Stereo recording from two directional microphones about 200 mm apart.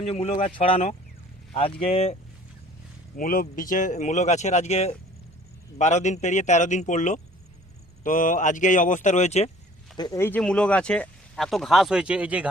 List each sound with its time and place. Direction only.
0.1 s speech: 30° left (ahead or behind)
3.2 s speech: 45° left (ahead or behind)
10.0 s speech: 15° left (ahead or behind); by 12.5 s 5° right (ahead or behind)